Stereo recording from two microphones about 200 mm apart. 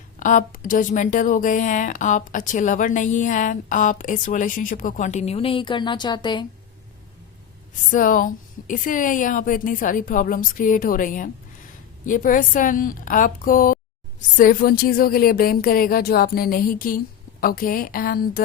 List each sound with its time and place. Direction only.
0.2 s a woman's voice: 40° left (ahead or behind); by 6.4 s 20° left (ahead or behind)
7.9 s a woman's voice: 40° left (ahead or behind)